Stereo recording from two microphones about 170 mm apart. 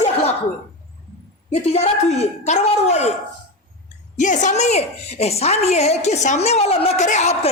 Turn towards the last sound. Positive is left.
turn(degrees=40)  # may be behind; listen again after turning